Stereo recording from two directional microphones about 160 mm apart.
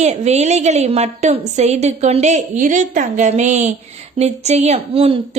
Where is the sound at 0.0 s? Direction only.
45° right (ahead or behind).